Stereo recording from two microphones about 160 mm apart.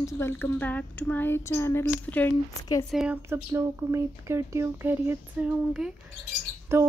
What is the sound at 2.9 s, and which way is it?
Speech, 10° right (ahead or behind).